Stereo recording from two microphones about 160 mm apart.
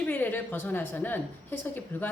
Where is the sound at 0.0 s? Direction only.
10° left (ahead or behind).